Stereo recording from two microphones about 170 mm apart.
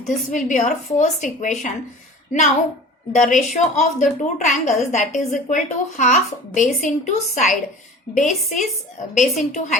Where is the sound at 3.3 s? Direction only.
45° left (ahead or behind).